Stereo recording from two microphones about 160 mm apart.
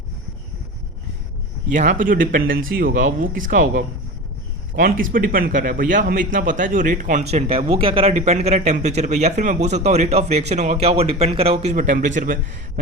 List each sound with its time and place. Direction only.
1.7 s a man's voice: 50° right (ahead or behind); by 8.1 s 35° right (ahead or behind)
8.1 s speech: 45° right (ahead or behind)